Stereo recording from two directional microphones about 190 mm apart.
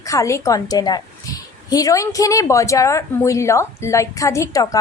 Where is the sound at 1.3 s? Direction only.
20° left (ahead or behind).